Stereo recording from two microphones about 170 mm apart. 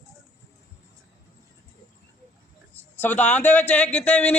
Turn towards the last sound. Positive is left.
turn(degrees=10)  # may be behind; listen again after turning